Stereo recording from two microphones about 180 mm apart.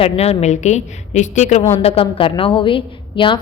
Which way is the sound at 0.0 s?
35° left (ahead or behind).